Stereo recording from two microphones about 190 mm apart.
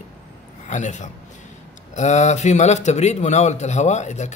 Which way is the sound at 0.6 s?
40° left (ahead or behind).